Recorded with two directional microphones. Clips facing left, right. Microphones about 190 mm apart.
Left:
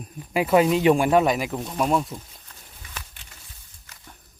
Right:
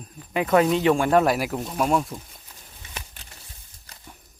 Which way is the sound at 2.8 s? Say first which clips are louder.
Right 1 dB; 25° right (ahead or behind).